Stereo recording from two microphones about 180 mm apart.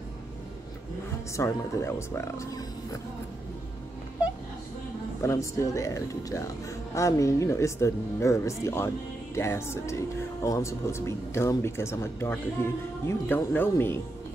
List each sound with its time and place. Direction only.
1.3 s speech: 15° left (ahead or behind)
5.2 s speech: 15° left (ahead or behind)